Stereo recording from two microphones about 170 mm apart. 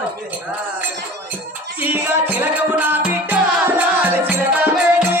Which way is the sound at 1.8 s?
10° right (ahead or behind).